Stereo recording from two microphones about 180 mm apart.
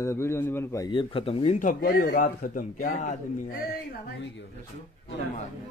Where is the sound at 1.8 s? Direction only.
55° left (ahead or behind).